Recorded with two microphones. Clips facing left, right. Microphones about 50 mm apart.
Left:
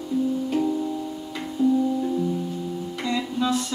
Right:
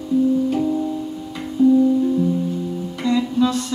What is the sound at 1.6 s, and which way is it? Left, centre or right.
Music, right.